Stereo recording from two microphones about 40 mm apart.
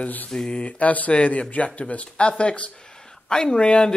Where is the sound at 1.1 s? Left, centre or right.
Left.